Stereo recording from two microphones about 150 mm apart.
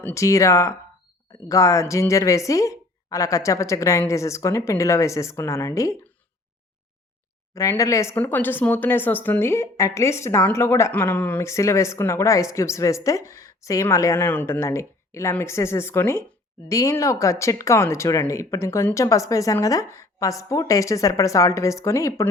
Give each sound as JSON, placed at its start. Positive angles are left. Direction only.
{"t": 0.0, "sound": "speech", "side_deg": 20}
{"t": 7.5, "sound": "speech", "side_deg": 20}